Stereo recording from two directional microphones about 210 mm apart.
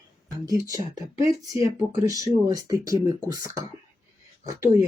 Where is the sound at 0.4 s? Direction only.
15° right (ahead or behind).